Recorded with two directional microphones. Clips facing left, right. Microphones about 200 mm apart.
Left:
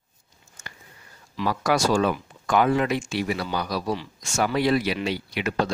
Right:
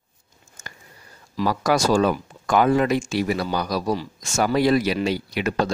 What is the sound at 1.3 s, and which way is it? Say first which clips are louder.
Speech: right 3 dB; 40° right (ahead or behind).